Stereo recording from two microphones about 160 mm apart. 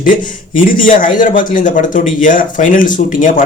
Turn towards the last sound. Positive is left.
turn(degrees=55)  # may be behind; listen again after turning